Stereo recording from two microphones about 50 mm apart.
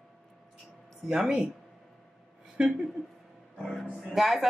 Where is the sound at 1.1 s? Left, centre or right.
Centre.